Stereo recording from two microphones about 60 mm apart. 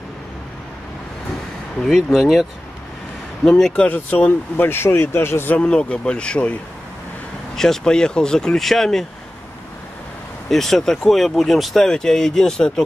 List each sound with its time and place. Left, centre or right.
1.8 s speech: centre
3.4 s speech: centre
3.8 s speech: left
5.6 s speech: centre
7.5 s speech: centre
10.5 s speech: centre